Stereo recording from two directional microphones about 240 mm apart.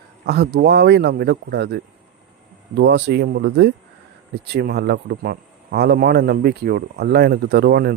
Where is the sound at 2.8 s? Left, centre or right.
Right.